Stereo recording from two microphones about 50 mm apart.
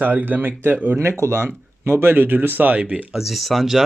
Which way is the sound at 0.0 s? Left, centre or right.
Right.